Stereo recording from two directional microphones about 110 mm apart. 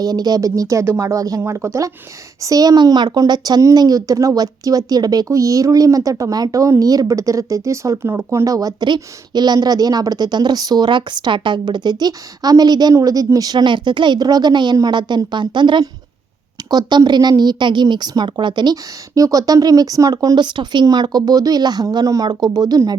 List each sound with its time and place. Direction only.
0.0 s speech: 35° right (ahead or behind)